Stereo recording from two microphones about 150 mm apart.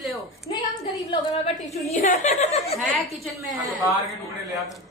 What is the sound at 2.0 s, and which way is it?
Speech, 55° left (ahead or behind).